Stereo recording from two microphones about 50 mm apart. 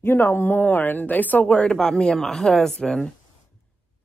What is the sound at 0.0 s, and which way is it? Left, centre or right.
Speech, left.